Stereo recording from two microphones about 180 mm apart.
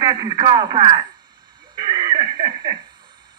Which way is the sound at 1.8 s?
25° right (ahead or behind).